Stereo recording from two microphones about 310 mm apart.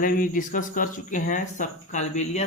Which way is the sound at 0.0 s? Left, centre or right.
Left.